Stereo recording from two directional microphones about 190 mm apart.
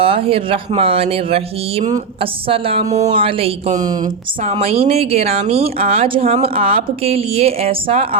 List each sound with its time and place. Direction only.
0.0 s speech: 30° right (ahead or behind)
3.8 s speech: 20° right (ahead or behind)
4.5 s speech: 30° right (ahead or behind)